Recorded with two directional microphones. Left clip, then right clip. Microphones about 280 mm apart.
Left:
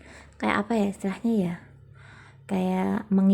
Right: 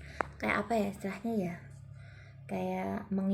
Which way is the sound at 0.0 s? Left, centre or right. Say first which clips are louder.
Left 4 dB; left.